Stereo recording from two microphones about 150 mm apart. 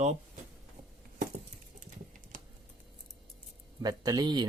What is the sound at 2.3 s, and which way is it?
Typing, 70° right (ahead or behind).